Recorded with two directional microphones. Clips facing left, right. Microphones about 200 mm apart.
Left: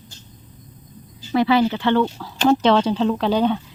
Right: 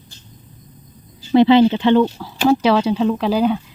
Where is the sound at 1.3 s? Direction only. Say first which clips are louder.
Right 6 dB; 25° right (ahead or behind).